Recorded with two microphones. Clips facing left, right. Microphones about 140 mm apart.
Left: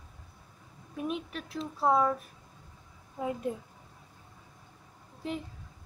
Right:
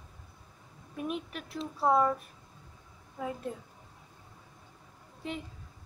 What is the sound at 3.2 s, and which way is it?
Speech, 25° left (ahead or behind).